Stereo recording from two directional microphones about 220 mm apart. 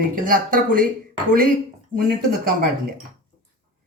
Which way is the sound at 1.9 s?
40° right (ahead or behind).